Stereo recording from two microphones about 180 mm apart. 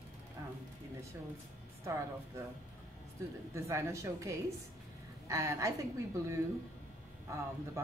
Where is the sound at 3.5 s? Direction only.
15° right (ahead or behind).